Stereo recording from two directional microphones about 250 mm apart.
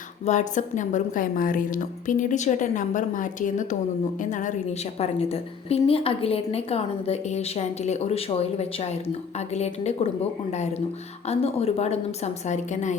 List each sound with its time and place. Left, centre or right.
0.3 s a woman's voice: left